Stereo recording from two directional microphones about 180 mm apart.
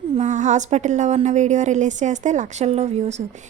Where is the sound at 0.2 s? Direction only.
45° right (ahead or behind).